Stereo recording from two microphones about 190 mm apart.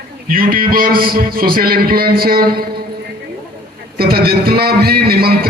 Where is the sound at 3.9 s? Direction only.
55° right (ahead or behind).